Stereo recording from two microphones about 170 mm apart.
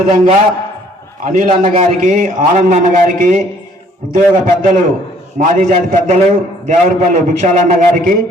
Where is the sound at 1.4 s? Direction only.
40° right (ahead or behind).